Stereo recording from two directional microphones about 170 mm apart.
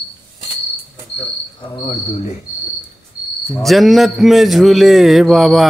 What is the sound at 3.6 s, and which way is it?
A man's voice, centre (ahead or behind).